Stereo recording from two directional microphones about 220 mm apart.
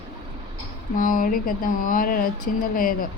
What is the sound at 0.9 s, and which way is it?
Speech, 35° left (ahead or behind).